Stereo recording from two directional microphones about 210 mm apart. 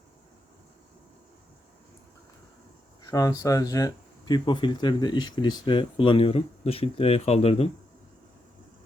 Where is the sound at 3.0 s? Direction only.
15° left (ahead or behind).